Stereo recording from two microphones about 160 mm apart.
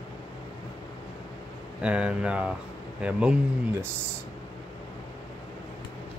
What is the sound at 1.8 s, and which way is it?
Speech, 5° right (ahead or behind).